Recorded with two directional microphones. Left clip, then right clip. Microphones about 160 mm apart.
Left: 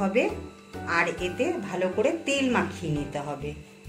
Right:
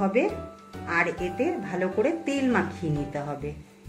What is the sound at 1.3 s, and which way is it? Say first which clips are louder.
A woman's voice: even; 60° right (ahead or behind).